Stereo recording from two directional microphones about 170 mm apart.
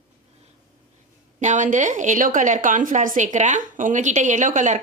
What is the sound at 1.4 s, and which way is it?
A woman's voice, 45° right (ahead or behind).